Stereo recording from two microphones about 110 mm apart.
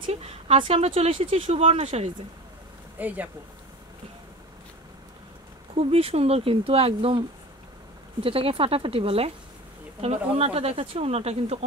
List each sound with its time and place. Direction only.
0.0 s a sound: 70° right (ahead or behind)
0.6 s speech: 60° right (ahead or behind)
1.5 s speech: 70° right (ahead or behind)
3.0 s speech: 15° right (ahead or behind)
5.8 s speech: 65° right (ahead or behind)